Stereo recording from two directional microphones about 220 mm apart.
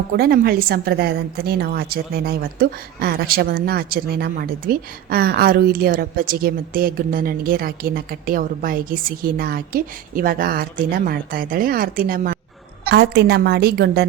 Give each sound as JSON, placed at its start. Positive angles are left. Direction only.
{"t": 0.2, "sound": "a woman's voice", "side_deg": -45}